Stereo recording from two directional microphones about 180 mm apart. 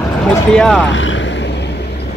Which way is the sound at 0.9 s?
90° left.